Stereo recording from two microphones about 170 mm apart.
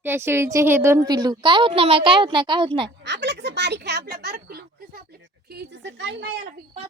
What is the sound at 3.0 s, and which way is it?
A woman's voice, 90° right.